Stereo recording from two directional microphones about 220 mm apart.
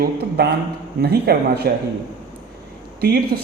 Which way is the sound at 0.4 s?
45° right (ahead or behind).